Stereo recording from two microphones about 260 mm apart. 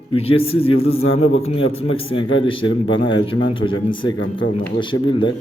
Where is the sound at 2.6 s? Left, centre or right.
Left.